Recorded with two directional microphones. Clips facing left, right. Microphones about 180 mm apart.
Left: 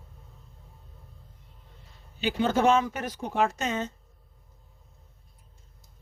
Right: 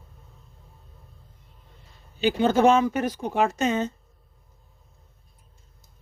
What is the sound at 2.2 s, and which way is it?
Speech, 15° right (ahead or behind).